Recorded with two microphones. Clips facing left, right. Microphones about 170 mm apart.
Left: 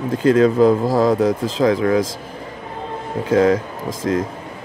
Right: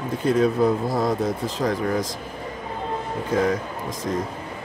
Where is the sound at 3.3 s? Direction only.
90° left.